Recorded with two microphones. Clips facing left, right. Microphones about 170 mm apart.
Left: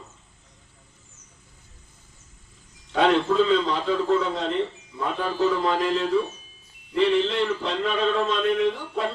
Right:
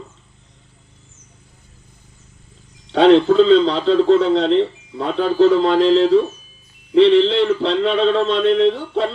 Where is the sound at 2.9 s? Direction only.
70° right (ahead or behind).